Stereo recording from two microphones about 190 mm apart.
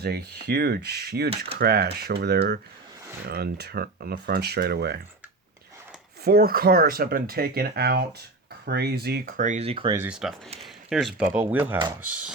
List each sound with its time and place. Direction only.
0.0 s speech: 55° right (ahead or behind)
6.2 s speech: 55° right (ahead or behind); by 9.9 s 30° right (ahead or behind)
9.9 s speech: 10° right (ahead or behind)